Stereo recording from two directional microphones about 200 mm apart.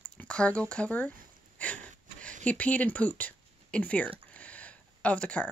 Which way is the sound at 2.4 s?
5° left (ahead or behind).